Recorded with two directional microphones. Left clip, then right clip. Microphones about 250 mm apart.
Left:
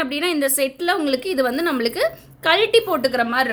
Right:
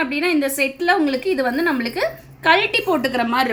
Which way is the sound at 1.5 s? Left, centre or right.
Left.